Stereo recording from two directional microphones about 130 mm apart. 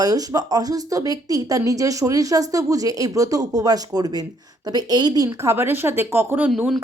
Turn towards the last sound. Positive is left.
turn(degrees=-15)  # may be behind; listen again after turning